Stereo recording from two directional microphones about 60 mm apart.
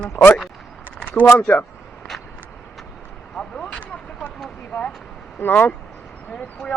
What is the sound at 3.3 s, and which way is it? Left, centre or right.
Vehicle, centre.